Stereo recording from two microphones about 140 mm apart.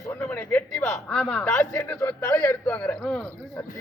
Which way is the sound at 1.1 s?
5° left (ahead or behind).